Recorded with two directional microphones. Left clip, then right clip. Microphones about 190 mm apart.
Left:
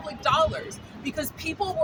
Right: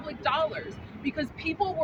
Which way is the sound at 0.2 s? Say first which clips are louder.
Left 5 dB; 25° left (ahead or behind).